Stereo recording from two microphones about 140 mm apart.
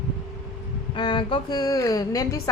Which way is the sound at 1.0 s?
35° left (ahead or behind).